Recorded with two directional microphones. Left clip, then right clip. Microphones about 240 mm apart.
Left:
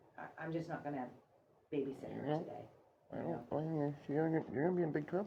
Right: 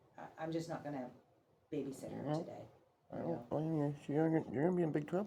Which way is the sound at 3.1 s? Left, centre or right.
Right.